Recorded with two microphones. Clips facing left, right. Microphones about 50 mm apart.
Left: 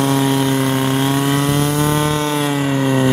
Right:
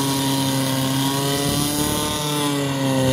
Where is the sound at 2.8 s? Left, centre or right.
Left.